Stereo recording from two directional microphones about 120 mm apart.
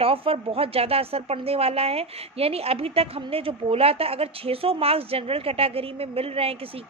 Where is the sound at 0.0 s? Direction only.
50° right (ahead or behind).